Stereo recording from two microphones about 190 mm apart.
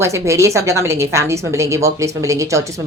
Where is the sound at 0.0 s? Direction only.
15° right (ahead or behind).